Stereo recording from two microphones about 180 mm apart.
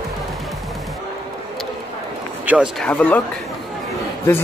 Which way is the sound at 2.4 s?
10° right (ahead or behind).